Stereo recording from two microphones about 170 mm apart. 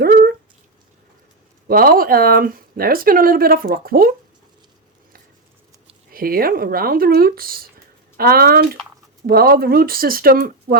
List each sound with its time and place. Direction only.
0.0 s a sound: 65° right (ahead or behind)
1.6 s speech: 60° right (ahead or behind)
6.1 s speech: 60° right (ahead or behind)